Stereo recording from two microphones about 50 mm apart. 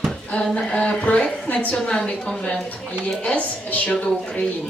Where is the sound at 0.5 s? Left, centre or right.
Left.